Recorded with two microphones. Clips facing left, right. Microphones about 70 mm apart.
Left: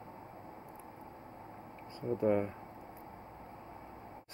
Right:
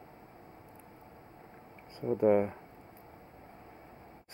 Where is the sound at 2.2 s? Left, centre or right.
Right.